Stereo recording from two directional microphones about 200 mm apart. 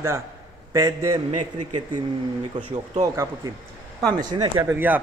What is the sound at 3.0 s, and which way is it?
A man's voice, 15° right (ahead or behind).